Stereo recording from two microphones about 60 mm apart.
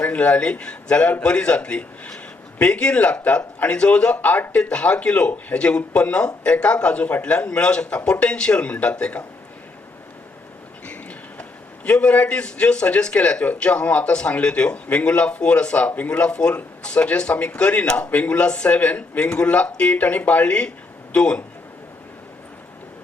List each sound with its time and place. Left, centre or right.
0.0 s speech: left
11.9 s a man's voice: centre